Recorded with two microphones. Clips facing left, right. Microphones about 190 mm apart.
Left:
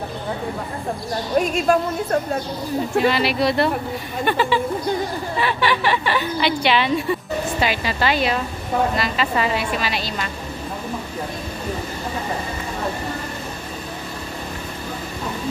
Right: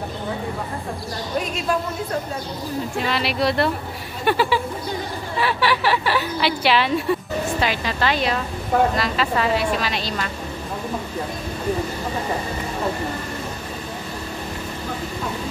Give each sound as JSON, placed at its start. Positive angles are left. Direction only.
{"t": 1.7, "sound": "a woman's voice", "side_deg": 50}
{"t": 3.1, "sound": "a woman's voice", "side_deg": 0}